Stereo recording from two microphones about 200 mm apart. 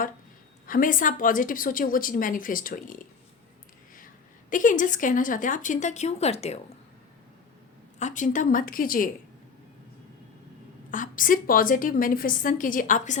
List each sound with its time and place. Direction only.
0.7 s a woman's voice: 45° left (ahead or behind)
4.4 s a woman's voice: 40° left (ahead or behind)
7.9 s a woman's voice: 35° left (ahead or behind)
10.9 s a woman's voice: 40° left (ahead or behind)